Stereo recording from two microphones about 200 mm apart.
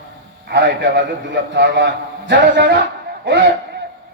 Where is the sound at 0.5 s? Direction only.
60° right (ahead or behind).